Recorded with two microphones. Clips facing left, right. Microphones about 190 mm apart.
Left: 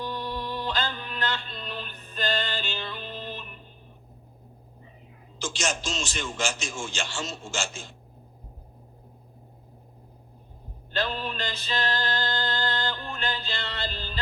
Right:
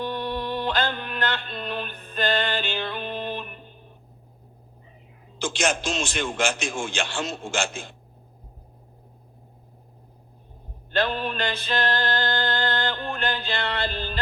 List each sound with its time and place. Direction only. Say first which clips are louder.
0.0 s music: right 4 dB; 60° right (ahead or behind)
5.4 s a man's voice: right 5 dB; 55° right (ahead or behind)
10.9 s music: right 5 dB; 60° right (ahead or behind)